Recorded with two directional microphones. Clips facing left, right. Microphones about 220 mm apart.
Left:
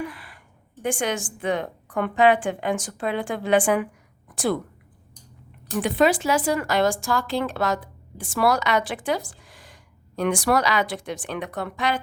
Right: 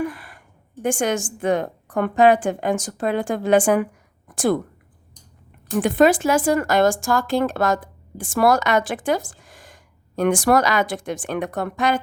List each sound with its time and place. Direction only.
0.0 s speech: 45° right (ahead or behind)
5.8 s speech: 50° right (ahead or behind)